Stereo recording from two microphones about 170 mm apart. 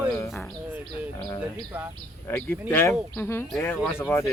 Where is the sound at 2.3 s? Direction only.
10° left (ahead or behind).